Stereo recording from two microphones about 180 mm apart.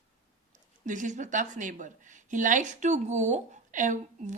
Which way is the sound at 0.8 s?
45° right (ahead or behind).